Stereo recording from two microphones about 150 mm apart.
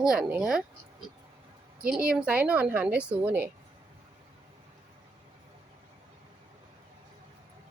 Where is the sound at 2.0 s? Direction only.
10° right (ahead or behind).